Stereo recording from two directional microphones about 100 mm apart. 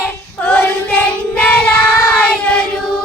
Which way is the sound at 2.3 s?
10° left (ahead or behind).